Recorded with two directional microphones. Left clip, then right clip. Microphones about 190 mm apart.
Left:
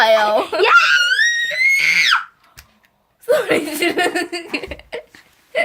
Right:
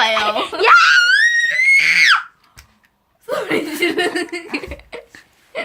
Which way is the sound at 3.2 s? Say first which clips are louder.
Left 4 dB; 40° left (ahead or behind).